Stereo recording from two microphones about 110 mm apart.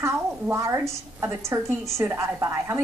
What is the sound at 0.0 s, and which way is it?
A woman's voice, 25° right (ahead or behind).